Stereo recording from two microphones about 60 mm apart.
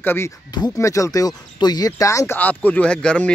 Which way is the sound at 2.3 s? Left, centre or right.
Left.